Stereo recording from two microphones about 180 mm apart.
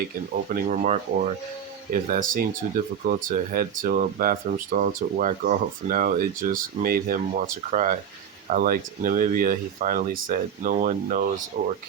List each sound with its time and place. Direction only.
0.4 s speech: 45° right (ahead or behind)